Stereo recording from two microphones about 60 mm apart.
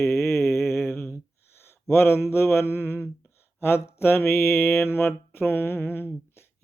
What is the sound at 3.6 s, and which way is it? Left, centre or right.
Speech, left.